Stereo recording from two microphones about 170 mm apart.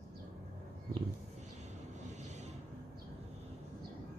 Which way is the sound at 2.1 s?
40° right (ahead or behind).